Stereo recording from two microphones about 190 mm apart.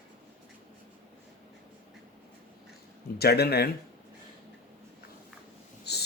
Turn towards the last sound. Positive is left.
turn(degrees=60)  # may be behind; listen again after turning